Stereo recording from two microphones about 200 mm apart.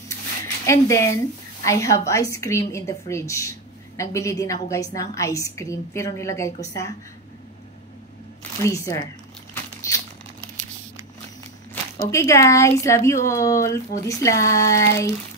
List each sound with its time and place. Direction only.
0.7 s a woman's voice: 15° left (ahead or behind)
8.6 s crumpling: 15° left (ahead or behind)
12.1 s a woman's voice: 15° left (ahead or behind)